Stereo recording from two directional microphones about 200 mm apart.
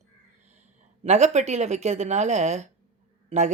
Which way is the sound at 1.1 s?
35° right (ahead or behind).